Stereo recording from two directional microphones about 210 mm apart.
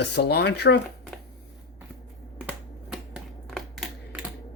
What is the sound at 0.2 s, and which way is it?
Speech, 50° left (ahead or behind).